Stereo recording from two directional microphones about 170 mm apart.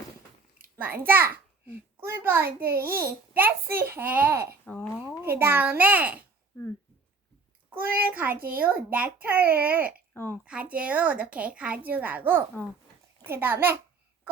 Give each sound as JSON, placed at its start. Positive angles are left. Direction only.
{"t": 0.8, "sound": "a child's voice", "side_deg": -10}
{"t": 4.6, "sound": "speech", "side_deg": 10}
{"t": 5.2, "sound": "a child's voice", "side_deg": -10}
{"t": 7.7, "sound": "a child's voice", "side_deg": -10}
{"t": 10.2, "sound": "a woman's voice", "side_deg": 10}
{"t": 10.4, "sound": "a child's voice", "side_deg": -5}